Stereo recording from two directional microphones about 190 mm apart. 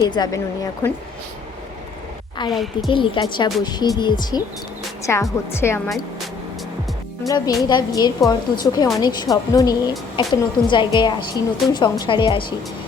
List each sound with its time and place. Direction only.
0.1 s a woman's voice: 20° left (ahead or behind)
2.5 s a woman's voice: centre (ahead or behind)
2.9 s a woman's voice: 25° left (ahead or behind)
7.3 s a woman's voice: 20° left (ahead or behind)